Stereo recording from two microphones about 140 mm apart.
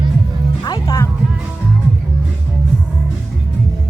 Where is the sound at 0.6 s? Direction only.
30° left (ahead or behind).